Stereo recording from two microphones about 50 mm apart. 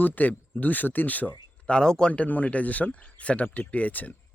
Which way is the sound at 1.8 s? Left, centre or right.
Centre.